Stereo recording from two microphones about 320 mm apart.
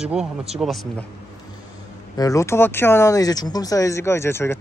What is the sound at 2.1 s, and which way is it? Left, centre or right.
Speech, centre.